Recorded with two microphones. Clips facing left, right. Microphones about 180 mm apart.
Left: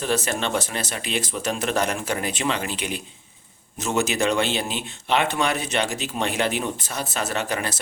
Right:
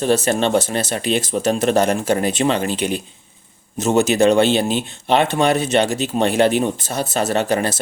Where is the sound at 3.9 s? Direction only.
25° right (ahead or behind).